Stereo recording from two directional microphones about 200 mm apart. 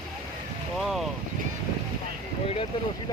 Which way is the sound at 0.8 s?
Centre (ahead or behind).